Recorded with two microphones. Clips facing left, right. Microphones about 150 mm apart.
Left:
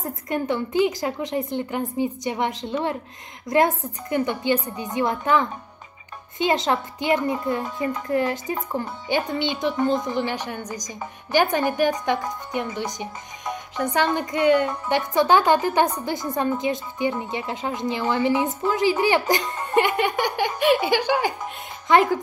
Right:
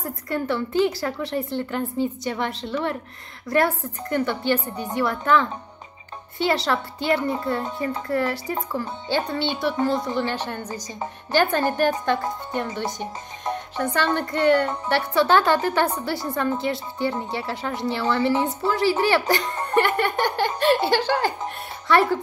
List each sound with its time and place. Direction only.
0.0 s a woman's voice: 20° left (ahead or behind)